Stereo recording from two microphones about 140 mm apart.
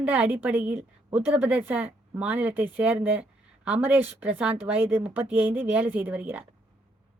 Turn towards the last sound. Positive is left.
turn(degrees=-10)  # may be behind; listen again after turning